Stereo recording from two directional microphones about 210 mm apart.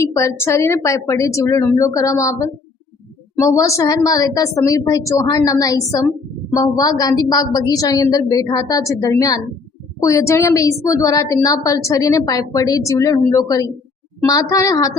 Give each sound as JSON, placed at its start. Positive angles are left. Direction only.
{"t": 0.2, "sound": "a woman's voice", "side_deg": 15}